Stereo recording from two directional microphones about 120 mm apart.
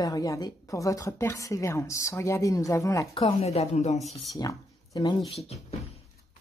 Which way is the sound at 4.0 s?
Centre (ahead or behind).